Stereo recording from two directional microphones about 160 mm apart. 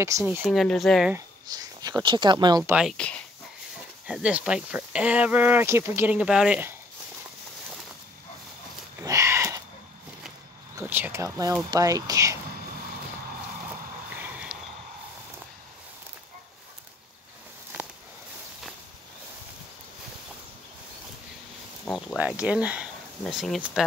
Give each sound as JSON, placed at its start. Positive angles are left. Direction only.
{"t": 0.5, "sound": "speech", "side_deg": 0}
{"t": 1.1, "sound": "speech", "side_deg": -25}
{"t": 2.6, "sound": "speech", "side_deg": -5}
{"t": 4.1, "sound": "speech", "side_deg": -5}
{"t": 9.0, "sound": "a sound", "side_deg": -20}
{"t": 10.8, "sound": "speech", "side_deg": -15}
{"t": 14.2, "sound": "a sound", "side_deg": -5}
{"t": 21.9, "sound": "speech", "side_deg": -5}